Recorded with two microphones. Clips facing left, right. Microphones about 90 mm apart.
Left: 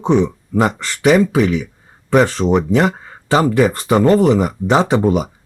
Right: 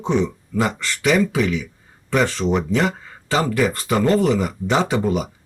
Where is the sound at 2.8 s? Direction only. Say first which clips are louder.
Left 5 dB; 35° left (ahead or behind).